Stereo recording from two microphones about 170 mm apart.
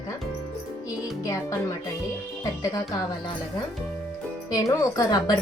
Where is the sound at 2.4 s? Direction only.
20° left (ahead or behind).